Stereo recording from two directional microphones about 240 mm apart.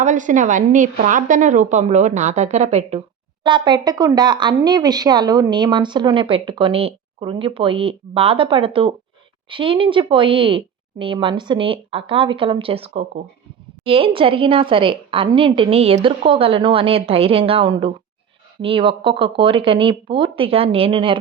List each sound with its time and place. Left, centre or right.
0.0 s a woman's voice: right